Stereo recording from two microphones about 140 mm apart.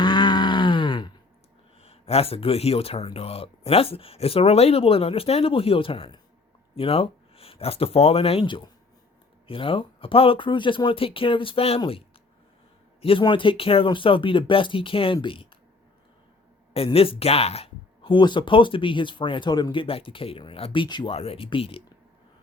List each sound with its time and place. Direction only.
0.0 s groan: 30° left (ahead or behind)
1.8 s speech: 45° left (ahead or behind)
13.0 s speech: 40° left (ahead or behind)
16.7 s speech: 45° left (ahead or behind)